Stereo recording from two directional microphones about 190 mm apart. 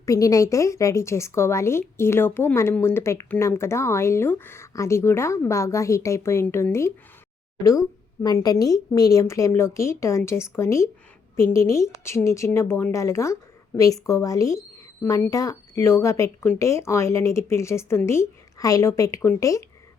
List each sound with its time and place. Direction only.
0.0 s speech: 15° left (ahead or behind)